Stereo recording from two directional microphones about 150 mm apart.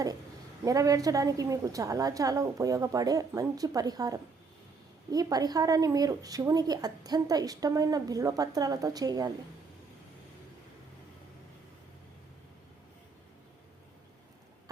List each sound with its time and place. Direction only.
0.6 s a woman's voice: 25° right (ahead or behind)